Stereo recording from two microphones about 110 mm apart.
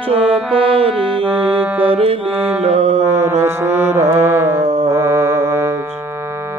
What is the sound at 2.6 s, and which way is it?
Music, 75° right (ahead or behind).